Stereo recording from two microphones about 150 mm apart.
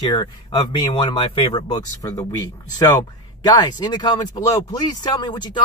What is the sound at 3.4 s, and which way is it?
Speech, 30° left (ahead or behind).